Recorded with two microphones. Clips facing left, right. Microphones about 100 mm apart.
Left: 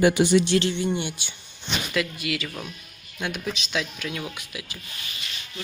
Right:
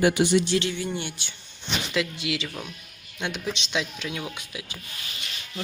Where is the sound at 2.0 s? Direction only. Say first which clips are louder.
Even; 15° right (ahead or behind).